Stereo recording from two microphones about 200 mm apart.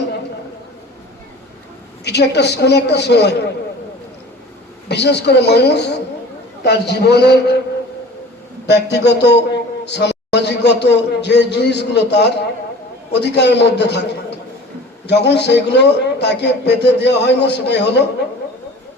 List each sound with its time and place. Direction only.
2.0 s a man's voice: 55° left (ahead or behind)
4.9 s a man's voice: 55° left (ahead or behind)
8.6 s a man's voice: 60° left (ahead or behind)